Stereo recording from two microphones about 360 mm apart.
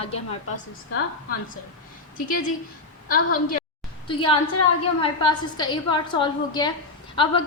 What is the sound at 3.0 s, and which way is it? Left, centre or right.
A woman's voice, left.